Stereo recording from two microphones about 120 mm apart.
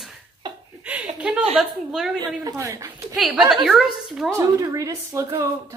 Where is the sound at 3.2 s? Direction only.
5° right (ahead or behind).